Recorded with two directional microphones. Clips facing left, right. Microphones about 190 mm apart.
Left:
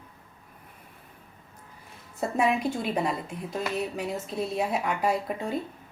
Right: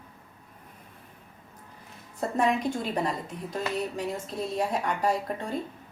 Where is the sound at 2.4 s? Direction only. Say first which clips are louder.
Even; 10° left (ahead or behind).